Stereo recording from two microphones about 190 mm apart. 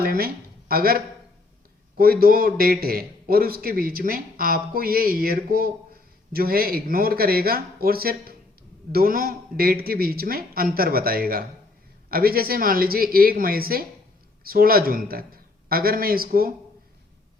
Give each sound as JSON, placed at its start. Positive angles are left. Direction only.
{"t": 0.0, "sound": "a man's voice", "side_deg": -55}